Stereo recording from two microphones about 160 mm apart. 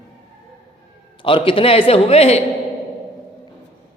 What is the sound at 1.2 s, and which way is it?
A man's voice, 35° left (ahead or behind).